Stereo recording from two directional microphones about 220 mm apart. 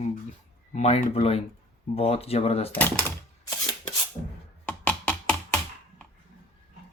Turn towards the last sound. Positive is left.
turn(degrees=5)  # may be behind; listen again after turning